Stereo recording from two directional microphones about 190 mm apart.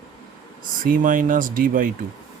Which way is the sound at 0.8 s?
45° right (ahead or behind).